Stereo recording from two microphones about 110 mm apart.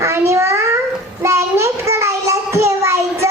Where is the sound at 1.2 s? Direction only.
25° right (ahead or behind).